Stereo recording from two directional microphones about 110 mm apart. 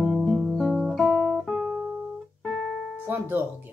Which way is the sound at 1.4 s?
Centre (ahead or behind).